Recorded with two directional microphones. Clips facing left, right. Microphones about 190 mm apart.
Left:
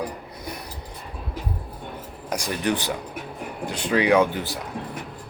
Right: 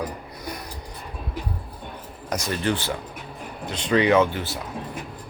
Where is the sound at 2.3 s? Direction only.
15° left (ahead or behind).